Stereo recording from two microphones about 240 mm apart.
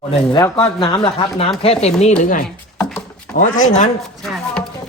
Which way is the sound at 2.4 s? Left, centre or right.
Centre.